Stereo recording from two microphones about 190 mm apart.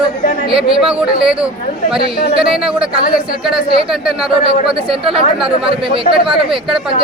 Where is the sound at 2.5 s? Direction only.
5° right (ahead or behind).